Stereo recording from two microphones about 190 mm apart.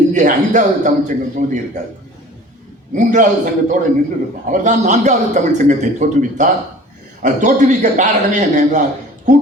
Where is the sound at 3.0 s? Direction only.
40° right (ahead or behind).